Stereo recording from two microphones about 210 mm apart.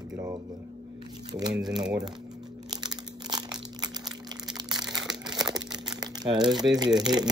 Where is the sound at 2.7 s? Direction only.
20° right (ahead or behind).